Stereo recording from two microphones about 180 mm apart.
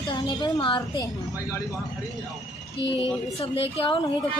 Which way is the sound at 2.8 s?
90° left.